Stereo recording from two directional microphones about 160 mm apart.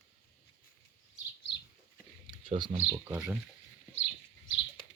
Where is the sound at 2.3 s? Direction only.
30° right (ahead or behind).